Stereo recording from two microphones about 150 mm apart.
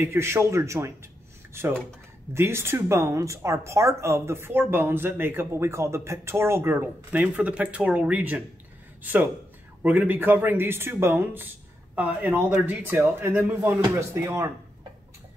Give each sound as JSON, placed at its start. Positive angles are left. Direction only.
{"t": 0.0, "sound": "speech", "side_deg": -15}